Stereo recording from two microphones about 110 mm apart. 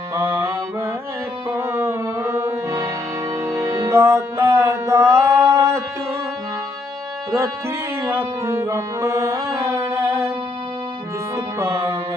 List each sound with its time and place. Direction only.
0.1 s mantra: 25° right (ahead or behind)
1.5 s music: 25° right (ahead or behind)
7.3 s music: 30° right (ahead or behind)
11.3 s music: 25° right (ahead or behind)